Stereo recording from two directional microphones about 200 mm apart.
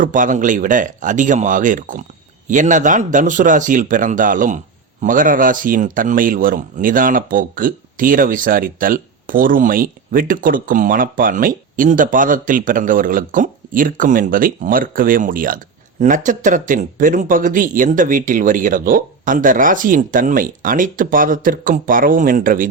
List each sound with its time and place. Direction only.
0.0 s speech: 40° right (ahead or behind)